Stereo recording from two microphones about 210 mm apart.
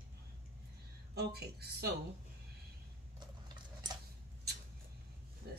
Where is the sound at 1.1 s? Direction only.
50° right (ahead or behind).